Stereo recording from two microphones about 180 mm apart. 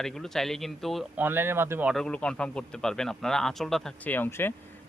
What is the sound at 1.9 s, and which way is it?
A man's voice, 5° left (ahead or behind).